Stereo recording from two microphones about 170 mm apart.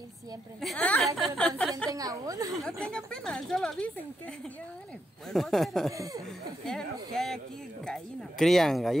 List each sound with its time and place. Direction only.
0.6 s a woman's voice: 5° left (ahead or behind)
1.6 s a sound: 5° left (ahead or behind)
1.9 s a woman's voice: 20° right (ahead or behind)
2.5 s speech: 5° left (ahead or behind)
5.3 s speech: centre (ahead or behind)
5.9 s a woman's voice: 20° right (ahead or behind)
6.6 s speech: centre (ahead or behind)